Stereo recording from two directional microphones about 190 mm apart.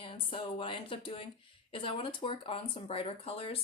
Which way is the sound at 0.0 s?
30° left (ahead or behind).